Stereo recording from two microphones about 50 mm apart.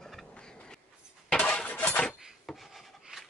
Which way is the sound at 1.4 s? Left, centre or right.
Left.